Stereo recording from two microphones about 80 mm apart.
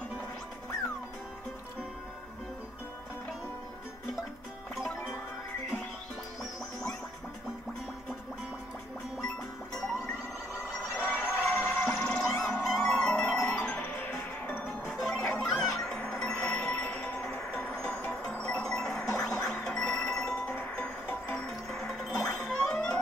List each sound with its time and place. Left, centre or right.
4.7 s music: centre
11.1 s a sound: left
11.8 s music: centre
14.6 s music: centre
20.5 s music: centre